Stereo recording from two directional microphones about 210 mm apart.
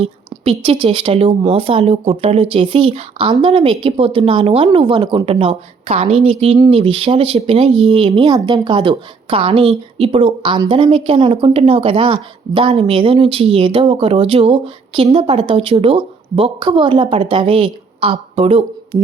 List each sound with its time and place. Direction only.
0.0 s speech: 25° right (ahead or behind)